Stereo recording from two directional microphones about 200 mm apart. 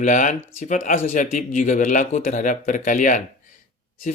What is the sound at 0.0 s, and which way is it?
Speech, 40° left (ahead or behind).